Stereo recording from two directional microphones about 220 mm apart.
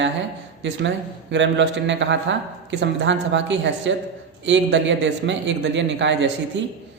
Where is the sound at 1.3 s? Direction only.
55° right (ahead or behind).